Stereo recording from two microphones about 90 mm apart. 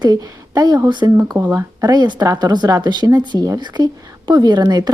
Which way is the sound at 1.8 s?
40° right (ahead or behind).